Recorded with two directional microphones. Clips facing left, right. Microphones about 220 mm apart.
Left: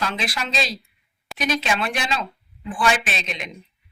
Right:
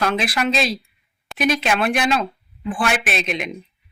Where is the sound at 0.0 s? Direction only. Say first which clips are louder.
Right 7 dB; 55° right (ahead or behind).